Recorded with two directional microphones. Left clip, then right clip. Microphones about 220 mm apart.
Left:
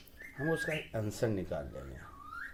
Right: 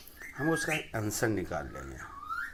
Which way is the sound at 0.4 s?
10° right (ahead or behind).